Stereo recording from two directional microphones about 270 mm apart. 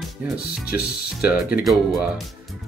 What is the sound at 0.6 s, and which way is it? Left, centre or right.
Speech, left.